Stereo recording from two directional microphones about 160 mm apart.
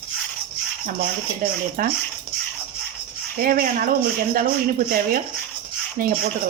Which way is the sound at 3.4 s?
65° right (ahead or behind).